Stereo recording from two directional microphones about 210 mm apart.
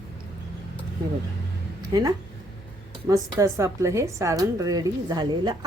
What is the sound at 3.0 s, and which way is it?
A woman's voice, 15° right (ahead or behind).